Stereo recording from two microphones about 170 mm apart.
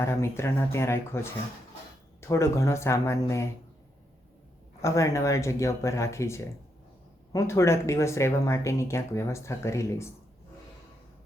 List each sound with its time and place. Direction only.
0.0 s speech: 15° left (ahead or behind)
4.8 s speech: 15° left (ahead or behind)